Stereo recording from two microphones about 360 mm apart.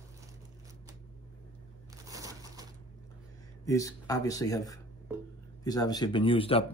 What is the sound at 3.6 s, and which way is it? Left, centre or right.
Speech, centre.